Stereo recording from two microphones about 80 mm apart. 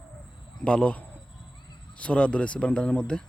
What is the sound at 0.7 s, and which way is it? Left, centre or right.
Speech, centre.